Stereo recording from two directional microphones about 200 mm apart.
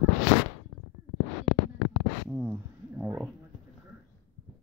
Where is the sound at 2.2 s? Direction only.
5° right (ahead or behind).